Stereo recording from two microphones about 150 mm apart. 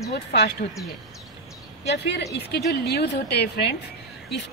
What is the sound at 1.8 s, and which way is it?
A woman's voice, 90° left.